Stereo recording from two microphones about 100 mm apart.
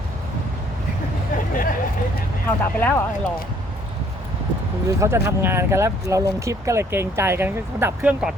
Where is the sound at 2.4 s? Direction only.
20° left (ahead or behind).